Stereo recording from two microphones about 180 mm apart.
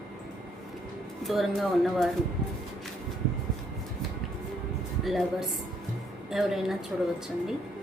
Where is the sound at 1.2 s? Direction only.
Centre (ahead or behind).